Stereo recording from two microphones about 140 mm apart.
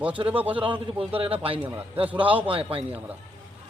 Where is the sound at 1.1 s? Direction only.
45° right (ahead or behind).